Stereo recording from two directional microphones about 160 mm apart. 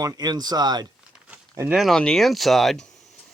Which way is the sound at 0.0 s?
25° right (ahead or behind).